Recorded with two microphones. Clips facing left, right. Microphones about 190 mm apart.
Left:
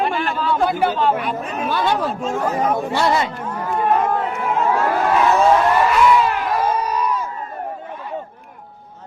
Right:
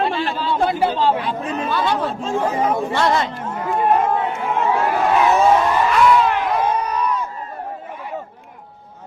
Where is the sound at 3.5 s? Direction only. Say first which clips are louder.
Right 1 dB; 25° right (ahead or behind).